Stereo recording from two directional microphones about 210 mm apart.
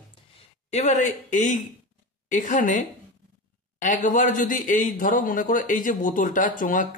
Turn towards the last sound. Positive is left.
turn(degrees=40)  # may be behind; listen again after turning